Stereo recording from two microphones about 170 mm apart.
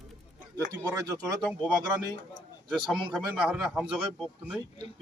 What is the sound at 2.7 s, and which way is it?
Speech, centre (ahead or behind).